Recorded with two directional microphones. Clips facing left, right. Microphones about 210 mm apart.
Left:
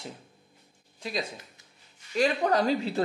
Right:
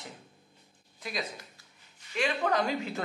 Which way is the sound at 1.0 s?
30° left (ahead or behind).